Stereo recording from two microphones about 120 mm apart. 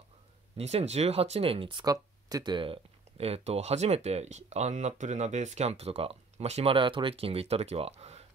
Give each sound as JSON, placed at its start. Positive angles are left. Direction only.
{"t": 0.6, "sound": "speech", "side_deg": -60}